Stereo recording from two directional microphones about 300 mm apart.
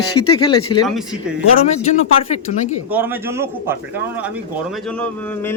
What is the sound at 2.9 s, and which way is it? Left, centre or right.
Speech, centre.